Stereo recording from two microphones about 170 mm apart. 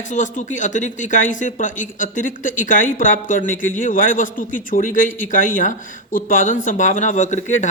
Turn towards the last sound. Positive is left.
turn(degrees=45)  # may be behind; listen again after turning